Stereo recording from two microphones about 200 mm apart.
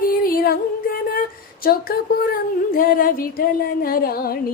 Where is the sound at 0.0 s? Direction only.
45° left (ahead or behind).